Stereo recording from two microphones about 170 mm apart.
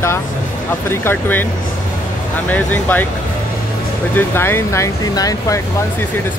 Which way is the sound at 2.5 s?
10° left (ahead or behind).